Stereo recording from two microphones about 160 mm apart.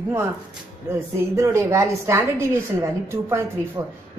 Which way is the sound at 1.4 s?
15° right (ahead or behind).